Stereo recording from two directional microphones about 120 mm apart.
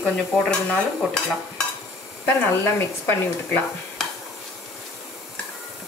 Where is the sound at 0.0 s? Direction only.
5° left (ahead or behind).